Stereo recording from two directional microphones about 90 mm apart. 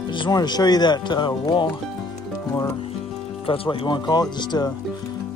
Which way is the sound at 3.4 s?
90° left.